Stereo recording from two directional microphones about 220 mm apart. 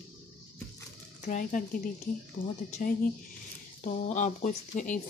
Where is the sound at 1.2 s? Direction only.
35° left (ahead or behind).